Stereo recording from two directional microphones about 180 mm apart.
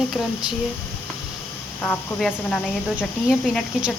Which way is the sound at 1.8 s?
5° left (ahead or behind).